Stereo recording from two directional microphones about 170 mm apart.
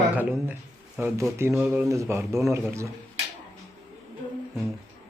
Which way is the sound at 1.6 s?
Centre (ahead or behind).